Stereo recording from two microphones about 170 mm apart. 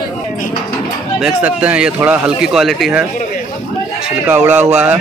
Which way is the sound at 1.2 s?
10° right (ahead or behind).